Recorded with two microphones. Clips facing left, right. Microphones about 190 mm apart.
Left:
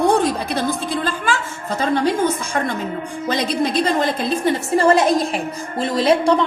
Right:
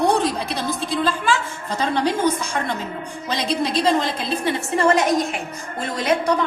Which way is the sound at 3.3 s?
55° left (ahead or behind).